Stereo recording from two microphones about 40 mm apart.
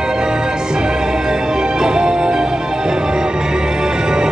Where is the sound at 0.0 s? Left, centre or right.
Centre.